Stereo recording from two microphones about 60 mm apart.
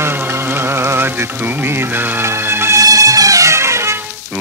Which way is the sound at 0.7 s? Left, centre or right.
Right.